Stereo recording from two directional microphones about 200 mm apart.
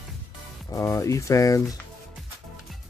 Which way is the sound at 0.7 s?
15° left (ahead or behind).